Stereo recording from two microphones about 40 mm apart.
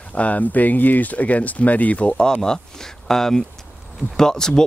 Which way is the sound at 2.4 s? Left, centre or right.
Centre.